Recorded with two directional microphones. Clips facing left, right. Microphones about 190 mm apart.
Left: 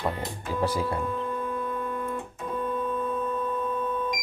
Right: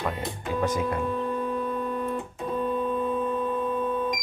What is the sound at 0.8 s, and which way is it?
Speech, 20° right (ahead or behind).